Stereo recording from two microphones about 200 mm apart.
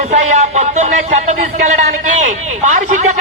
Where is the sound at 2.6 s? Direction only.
40° right (ahead or behind).